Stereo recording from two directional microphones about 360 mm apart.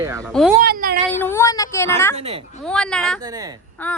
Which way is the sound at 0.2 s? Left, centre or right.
Centre.